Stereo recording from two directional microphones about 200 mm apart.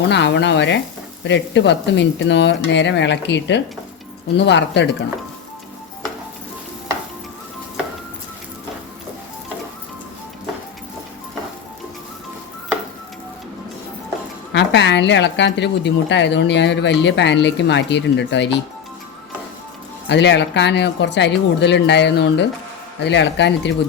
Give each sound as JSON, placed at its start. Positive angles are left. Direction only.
{"t": 0.1, "sound": "a woman's voice", "side_deg": 60}
{"t": 14.5, "sound": "a woman's voice", "side_deg": 60}
{"t": 20.1, "sound": "a woman's voice", "side_deg": 60}